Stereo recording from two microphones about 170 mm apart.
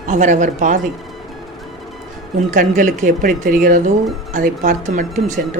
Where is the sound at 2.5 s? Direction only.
50° right (ahead or behind).